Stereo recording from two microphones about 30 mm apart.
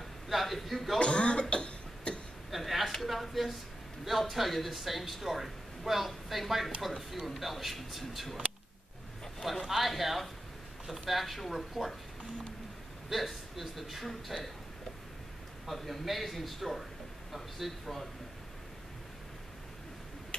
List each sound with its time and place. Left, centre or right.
0.3 s a sound: centre
0.9 s cough: left
2.5 s a sound: centre
4.0 s speech: centre
9.7 s speech: centre
11.5 s speech: centre
13.1 s speech: centre
15.6 s speech: centre